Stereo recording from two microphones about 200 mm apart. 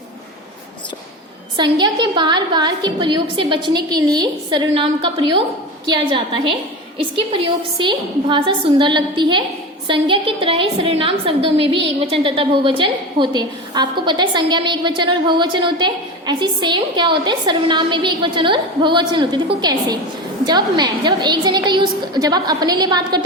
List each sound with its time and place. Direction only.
1.5 s a woman's voice: 20° right (ahead or behind)